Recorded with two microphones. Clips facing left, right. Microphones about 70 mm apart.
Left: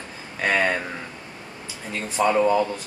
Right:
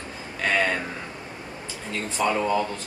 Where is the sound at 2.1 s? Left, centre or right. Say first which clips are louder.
Left 4 dB; centre.